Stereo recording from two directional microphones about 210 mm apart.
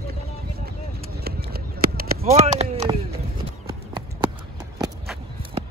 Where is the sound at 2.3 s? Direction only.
30° right (ahead or behind).